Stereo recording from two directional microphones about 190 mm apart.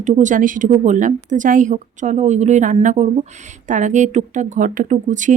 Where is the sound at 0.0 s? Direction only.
40° right (ahead or behind).